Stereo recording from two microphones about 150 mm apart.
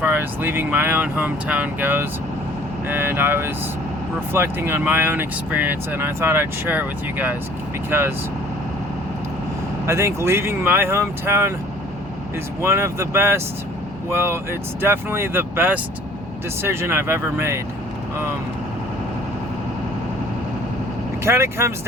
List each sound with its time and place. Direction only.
0.0 s speech: 15° right (ahead or behind)
9.8 s speech: 20° right (ahead or behind)
12.6 s speech: 15° right (ahead or behind)
21.2 s speech: 15° right (ahead or behind)